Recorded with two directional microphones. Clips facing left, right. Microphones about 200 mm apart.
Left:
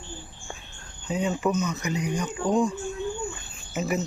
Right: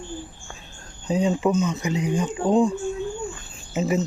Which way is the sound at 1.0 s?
35° right (ahead or behind).